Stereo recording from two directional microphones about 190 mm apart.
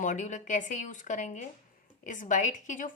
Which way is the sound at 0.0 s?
40° left (ahead or behind).